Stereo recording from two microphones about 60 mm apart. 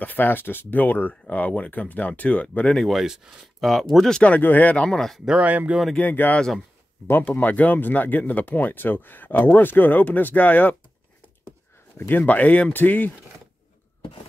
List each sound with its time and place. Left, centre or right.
0.0 s speech: left
2.8 s speech: centre
4.2 s speech: left
4.8 s speech: centre
5.4 s speech: right
5.9 s speech: left
12.0 s speech: left